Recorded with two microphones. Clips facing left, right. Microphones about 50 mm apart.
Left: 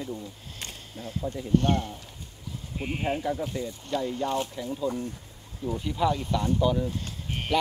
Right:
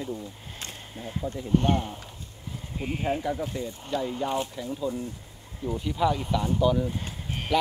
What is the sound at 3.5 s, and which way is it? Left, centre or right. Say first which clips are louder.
Speech: even; centre.